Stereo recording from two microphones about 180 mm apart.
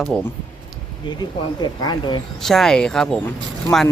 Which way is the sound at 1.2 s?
25° left (ahead or behind).